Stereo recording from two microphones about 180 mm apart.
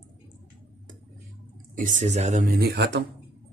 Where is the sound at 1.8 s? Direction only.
45° right (ahead or behind); by 3.0 s 65° right (ahead or behind).